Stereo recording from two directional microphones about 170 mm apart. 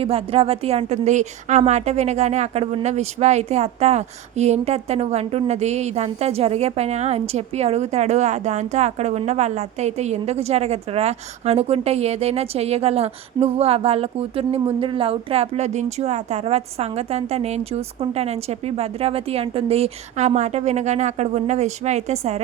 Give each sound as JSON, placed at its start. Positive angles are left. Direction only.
{"t": 0.0, "sound": "a woman's voice", "side_deg": -35}